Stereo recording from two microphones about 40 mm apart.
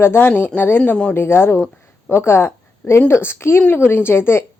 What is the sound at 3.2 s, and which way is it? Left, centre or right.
Speech, left.